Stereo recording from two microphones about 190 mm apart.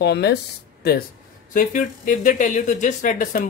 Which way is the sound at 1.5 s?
45° left (ahead or behind).